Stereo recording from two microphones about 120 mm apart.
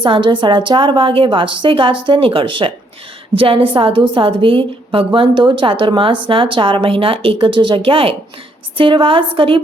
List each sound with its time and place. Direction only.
0.0 s a woman's voice: 45° right (ahead or behind)